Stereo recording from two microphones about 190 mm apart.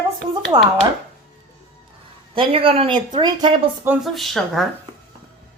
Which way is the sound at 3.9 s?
Centre (ahead or behind).